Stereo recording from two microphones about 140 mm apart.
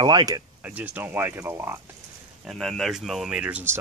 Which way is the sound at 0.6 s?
10° right (ahead or behind).